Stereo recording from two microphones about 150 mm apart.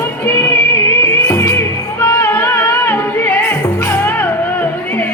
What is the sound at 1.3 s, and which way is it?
Music, 20° left (ahead or behind).